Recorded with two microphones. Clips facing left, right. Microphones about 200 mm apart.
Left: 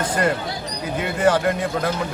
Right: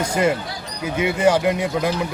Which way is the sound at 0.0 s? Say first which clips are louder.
Right 2 dB; 10° right (ahead or behind).